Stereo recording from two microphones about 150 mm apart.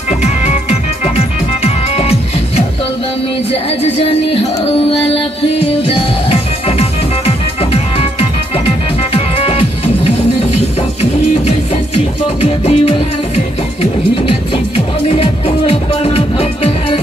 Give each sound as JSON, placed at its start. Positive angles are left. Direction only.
{"t": 0.2, "sound": "music", "side_deg": 45}
{"t": 6.8, "sound": "music", "side_deg": 45}
{"t": 15.0, "sound": "music", "side_deg": 40}